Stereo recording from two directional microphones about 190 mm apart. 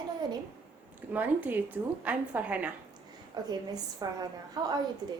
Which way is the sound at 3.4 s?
20° right (ahead or behind).